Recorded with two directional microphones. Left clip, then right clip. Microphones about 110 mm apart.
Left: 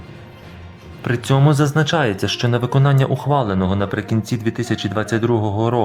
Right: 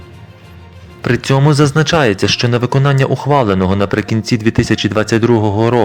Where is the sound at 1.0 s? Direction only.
25° right (ahead or behind).